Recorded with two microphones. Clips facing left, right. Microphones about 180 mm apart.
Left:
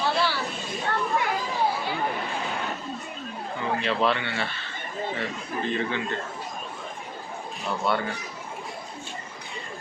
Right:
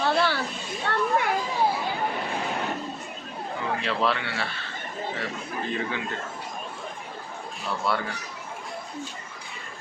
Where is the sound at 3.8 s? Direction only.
Centre (ahead or behind).